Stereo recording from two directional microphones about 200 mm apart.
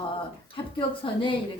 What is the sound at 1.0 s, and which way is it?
Speech, 25° left (ahead or behind).